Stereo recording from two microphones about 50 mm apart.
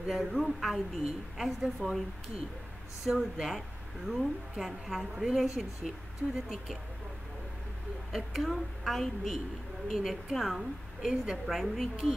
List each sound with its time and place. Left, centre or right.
0.1 s a woman's voice: centre
3.1 s a woman's voice: centre
6.2 s speech: left
8.1 s a woman's voice: centre